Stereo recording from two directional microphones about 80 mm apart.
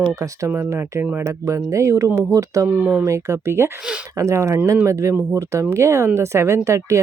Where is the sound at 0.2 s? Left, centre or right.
Right.